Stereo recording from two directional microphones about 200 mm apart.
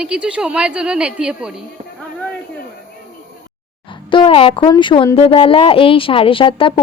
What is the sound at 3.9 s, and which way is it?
Speech, 25° left (ahead or behind).